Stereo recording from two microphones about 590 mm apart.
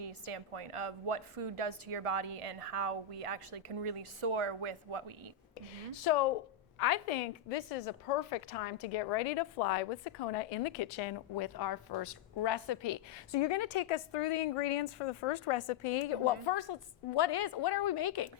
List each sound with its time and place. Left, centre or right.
0.0 s a woman's voice: right
5.9 s a woman's voice: left